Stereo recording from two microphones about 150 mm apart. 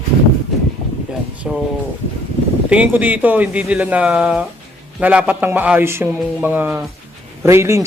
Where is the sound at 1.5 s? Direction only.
5° right (ahead or behind).